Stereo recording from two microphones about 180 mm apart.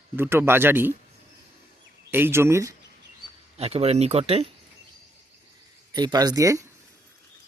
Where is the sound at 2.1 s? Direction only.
15° right (ahead or behind).